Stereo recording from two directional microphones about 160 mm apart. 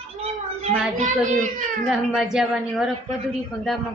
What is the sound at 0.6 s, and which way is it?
Speech, 50° right (ahead or behind).